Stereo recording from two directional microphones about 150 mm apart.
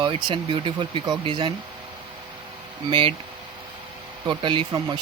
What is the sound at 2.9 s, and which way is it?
Speech, 35° right (ahead or behind).